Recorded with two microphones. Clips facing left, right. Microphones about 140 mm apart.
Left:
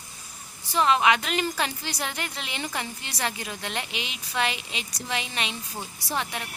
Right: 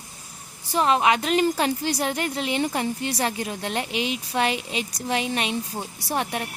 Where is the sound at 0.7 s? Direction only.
40° right (ahead or behind).